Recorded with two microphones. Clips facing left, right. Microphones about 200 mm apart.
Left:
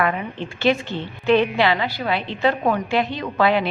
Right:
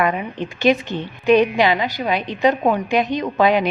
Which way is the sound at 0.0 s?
15° right (ahead or behind).